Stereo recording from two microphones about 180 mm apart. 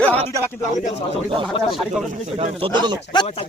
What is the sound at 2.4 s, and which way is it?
Speech, 30° right (ahead or behind).